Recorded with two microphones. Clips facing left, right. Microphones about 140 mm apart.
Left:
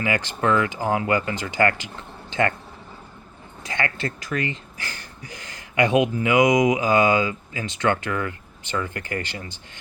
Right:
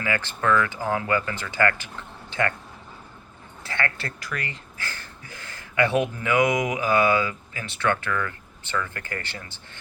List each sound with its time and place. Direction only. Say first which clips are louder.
0.0 s speech: left 3 dB; 15° left (ahead or behind)
3.6 s speech: left 3 dB; 15° left (ahead or behind)